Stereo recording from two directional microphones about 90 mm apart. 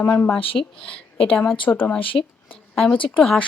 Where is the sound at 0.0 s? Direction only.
25° left (ahead or behind).